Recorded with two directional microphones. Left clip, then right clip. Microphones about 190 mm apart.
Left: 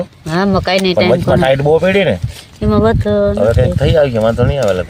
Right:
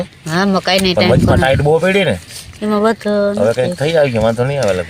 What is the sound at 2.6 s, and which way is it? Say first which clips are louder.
Speech: left 2 dB; 15° left (ahead or behind).